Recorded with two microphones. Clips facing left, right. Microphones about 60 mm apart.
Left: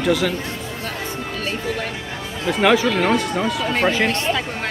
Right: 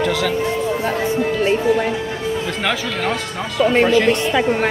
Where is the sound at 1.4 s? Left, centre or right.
Centre.